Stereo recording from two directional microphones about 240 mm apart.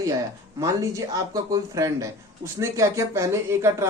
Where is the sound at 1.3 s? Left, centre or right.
Centre.